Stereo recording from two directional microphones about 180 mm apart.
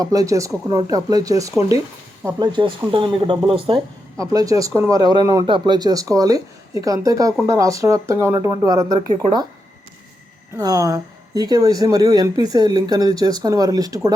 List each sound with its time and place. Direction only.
0.0 s speech: 20° right (ahead or behind)
4.2 s speech: 20° right (ahead or behind)
10.6 s speech: 20° right (ahead or behind)